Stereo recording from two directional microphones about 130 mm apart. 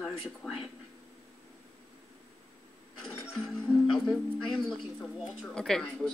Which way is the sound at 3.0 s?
Centre (ahead or behind).